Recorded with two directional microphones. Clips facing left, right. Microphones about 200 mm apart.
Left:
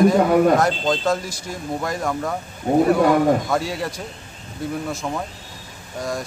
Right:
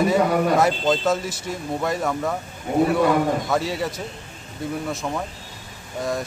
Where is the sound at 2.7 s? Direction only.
40° left (ahead or behind).